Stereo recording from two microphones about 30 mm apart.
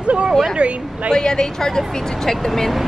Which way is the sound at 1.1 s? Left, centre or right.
Left.